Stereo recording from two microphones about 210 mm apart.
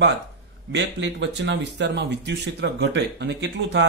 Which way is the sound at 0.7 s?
55° right (ahead or behind).